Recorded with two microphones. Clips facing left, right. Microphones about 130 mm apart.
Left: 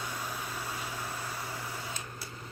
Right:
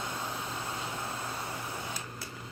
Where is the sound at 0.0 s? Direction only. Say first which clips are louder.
Right 1 dB; 25° right (ahead or behind).